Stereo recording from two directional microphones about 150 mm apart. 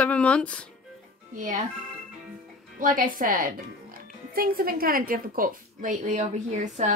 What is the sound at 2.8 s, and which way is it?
Speech, 65° right (ahead or behind).